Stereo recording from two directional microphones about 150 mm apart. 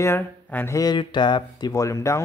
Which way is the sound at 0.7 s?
30° left (ahead or behind).